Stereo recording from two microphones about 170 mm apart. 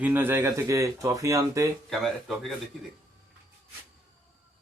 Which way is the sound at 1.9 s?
Centre (ahead or behind).